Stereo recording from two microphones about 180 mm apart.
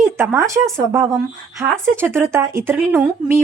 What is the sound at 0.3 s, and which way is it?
A woman's voice, 15° right (ahead or behind).